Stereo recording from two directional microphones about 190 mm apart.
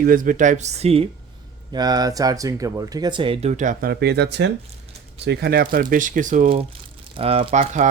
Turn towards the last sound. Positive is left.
turn(degrees=-35)  # may be behind; listen again after turning